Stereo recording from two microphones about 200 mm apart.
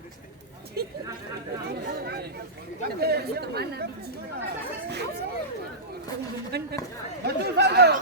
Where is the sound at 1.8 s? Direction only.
50° right (ahead or behind).